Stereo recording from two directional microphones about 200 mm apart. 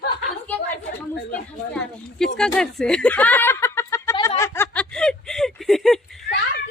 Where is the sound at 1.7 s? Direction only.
5° left (ahead or behind).